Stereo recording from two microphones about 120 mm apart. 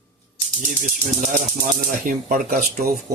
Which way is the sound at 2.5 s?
90° right.